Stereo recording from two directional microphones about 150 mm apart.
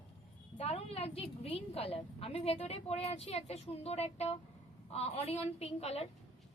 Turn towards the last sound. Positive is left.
turn(degrees=45)  # may be behind; listen again after turning